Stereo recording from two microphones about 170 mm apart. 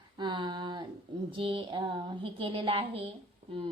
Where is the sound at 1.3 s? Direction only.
30° right (ahead or behind).